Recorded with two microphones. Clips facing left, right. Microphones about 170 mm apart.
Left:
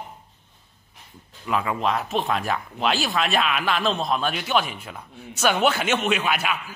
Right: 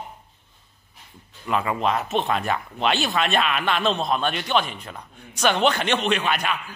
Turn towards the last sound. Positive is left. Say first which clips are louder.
# even
turn(degrees=5)  # may be behind; listen again after turning